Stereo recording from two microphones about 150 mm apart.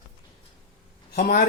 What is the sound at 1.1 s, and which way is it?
Speech, 75° left (ahead or behind).